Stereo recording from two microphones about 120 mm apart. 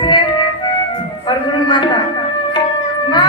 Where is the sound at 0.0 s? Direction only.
40° left (ahead or behind).